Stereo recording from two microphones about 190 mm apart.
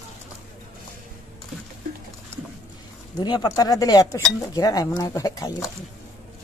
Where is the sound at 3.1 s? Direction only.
20° left (ahead or behind).